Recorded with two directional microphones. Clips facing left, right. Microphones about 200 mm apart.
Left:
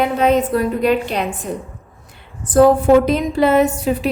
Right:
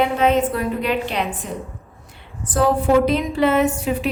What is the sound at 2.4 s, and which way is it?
A woman's voice, 45° left (ahead or behind).